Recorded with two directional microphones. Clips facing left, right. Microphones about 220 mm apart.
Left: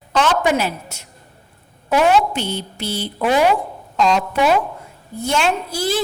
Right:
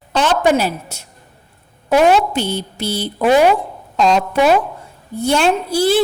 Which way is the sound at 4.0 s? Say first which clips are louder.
Right 3 dB; 40° right (ahead or behind).